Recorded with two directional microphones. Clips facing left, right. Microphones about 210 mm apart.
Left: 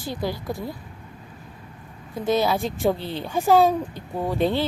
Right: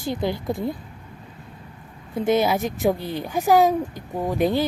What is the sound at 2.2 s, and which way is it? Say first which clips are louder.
Speech: right 2 dB; 20° right (ahead or behind).